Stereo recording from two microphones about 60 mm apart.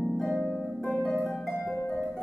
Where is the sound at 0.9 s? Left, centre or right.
Left.